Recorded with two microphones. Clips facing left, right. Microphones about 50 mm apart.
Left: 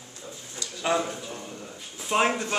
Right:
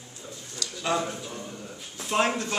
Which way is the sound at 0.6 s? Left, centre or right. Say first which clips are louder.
Left 2 dB; centre.